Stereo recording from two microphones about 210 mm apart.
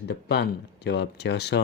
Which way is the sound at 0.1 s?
55° left (ahead or behind).